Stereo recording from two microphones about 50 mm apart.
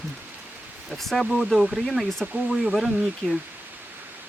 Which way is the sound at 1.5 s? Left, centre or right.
Centre.